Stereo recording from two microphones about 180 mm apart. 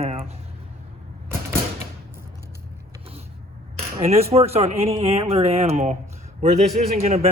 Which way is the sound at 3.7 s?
35° right (ahead or behind).